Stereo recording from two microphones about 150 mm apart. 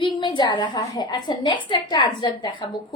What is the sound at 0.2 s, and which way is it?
A woman's voice, 30° left (ahead or behind).